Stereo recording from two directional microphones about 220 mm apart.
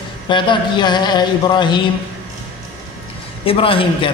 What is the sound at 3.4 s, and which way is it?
Speech, 25° left (ahead or behind).